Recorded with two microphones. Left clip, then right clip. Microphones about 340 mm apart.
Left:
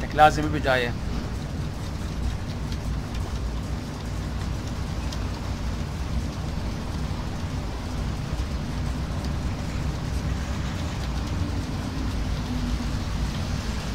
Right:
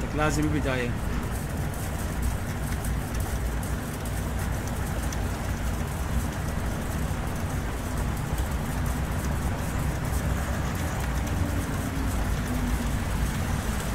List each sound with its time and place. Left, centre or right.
0.2 s speech: left